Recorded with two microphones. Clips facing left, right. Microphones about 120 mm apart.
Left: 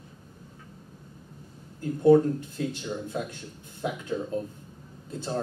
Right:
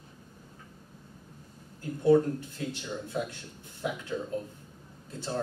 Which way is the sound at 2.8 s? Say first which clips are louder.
Left 2 dB; 15° left (ahead or behind).